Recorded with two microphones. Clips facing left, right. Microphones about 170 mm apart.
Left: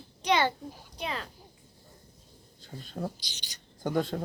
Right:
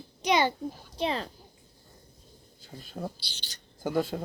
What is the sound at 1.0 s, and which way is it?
Speech, 30° right (ahead or behind).